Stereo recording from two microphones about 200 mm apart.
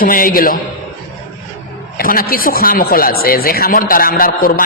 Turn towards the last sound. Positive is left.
turn(degrees=45)  # may be behind; listen again after turning